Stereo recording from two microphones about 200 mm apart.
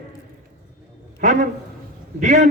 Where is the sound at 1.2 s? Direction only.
40° right (ahead or behind).